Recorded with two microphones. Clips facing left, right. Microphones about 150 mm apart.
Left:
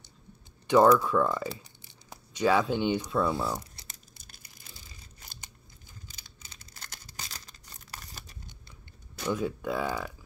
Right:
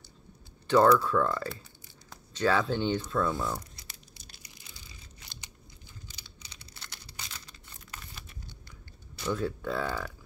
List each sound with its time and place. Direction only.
0.7 s speech: 15° left (ahead or behind)
3.8 s tearing: 45° left (ahead or behind)
5.2 s crumpling: 50° left (ahead or behind)
6.0 s tearing: 45° left (ahead or behind)
9.3 s speech: 10° left (ahead or behind)